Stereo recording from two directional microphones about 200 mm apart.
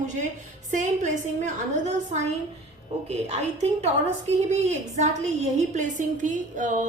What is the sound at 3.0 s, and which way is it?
Speech, 35° right (ahead or behind).